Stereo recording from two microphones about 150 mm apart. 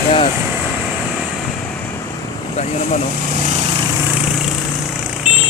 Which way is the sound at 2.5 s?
45° left (ahead or behind).